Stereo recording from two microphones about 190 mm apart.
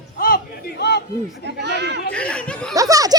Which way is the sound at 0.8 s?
60° left (ahead or behind).